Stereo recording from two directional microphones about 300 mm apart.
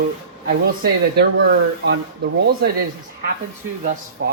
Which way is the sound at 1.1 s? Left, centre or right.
Right.